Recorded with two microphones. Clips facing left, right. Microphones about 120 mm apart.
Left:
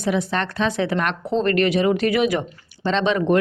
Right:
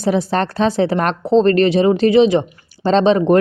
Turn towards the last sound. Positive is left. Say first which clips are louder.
# right 6 dB
turn(degrees=-35)  # may be behind; listen again after turning